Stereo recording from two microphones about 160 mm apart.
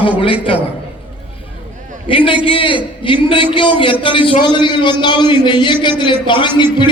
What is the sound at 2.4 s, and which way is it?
A man's voice, 35° left (ahead or behind).